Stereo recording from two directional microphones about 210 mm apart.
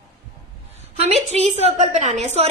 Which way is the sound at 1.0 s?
30° right (ahead or behind).